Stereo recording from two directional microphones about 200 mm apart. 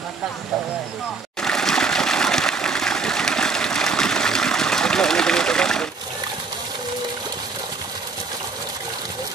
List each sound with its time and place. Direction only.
1.4 s water: 5° left (ahead or behind)